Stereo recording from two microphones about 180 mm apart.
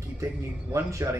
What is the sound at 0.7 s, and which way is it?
Speech, 15° right (ahead or behind).